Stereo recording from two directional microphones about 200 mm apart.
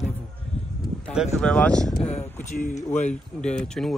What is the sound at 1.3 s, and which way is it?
Speech, 5° left (ahead or behind).